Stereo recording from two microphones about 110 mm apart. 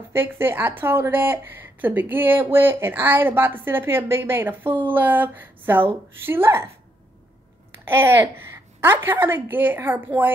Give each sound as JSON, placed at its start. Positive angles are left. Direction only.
{"t": 0.1, "sound": "a woman's voice", "side_deg": -20}
{"t": 7.8, "sound": "a woman's voice", "side_deg": -20}